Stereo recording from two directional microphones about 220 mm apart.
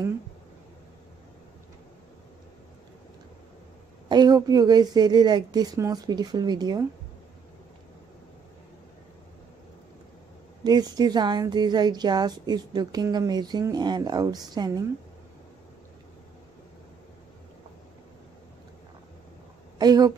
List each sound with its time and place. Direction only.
4.1 s a woman's voice: 20° right (ahead or behind)
10.6 s a woman's voice: 20° right (ahead or behind)
19.8 s speech: 15° right (ahead or behind)